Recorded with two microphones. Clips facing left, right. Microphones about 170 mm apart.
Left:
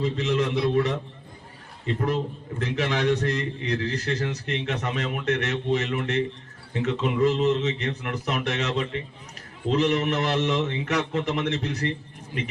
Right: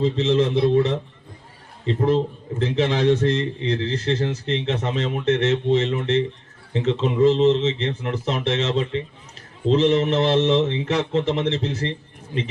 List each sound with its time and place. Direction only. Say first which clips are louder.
0.0 s a man's voice: right 5 dB; 25° right (ahead or behind)